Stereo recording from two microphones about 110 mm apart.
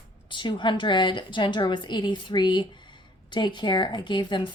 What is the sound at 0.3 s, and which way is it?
A woman's voice, 50° left (ahead or behind).